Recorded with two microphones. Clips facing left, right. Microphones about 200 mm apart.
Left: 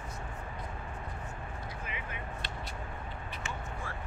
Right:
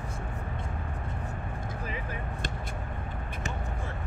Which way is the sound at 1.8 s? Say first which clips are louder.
Right 5 dB; 35° right (ahead or behind).